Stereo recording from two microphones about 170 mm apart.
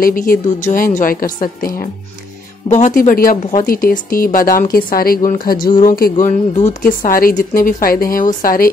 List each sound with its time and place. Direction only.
0.0 s a woman's voice: 55° left (ahead or behind)